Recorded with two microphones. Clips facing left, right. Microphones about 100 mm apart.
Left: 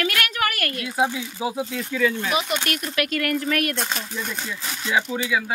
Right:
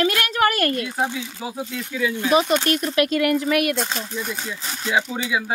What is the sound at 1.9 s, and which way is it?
Speech, 10° right (ahead or behind).